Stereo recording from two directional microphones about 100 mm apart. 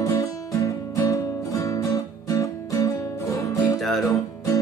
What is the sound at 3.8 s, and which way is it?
Music, centre (ahead or behind).